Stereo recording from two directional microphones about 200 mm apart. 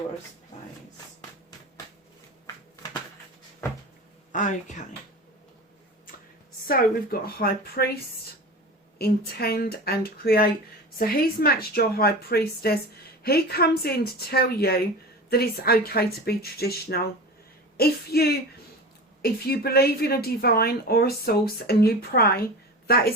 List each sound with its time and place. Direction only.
4.3 s speech: 40° left (ahead or behind)
6.7 s a woman's voice: 45° left (ahead or behind)
9.0 s a woman's voice: 50° left (ahead or behind)